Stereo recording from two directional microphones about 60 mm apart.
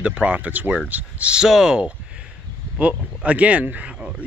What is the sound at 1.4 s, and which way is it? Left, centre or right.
Speech, centre.